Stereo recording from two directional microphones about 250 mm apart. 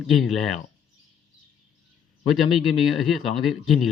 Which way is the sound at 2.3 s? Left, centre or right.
Centre.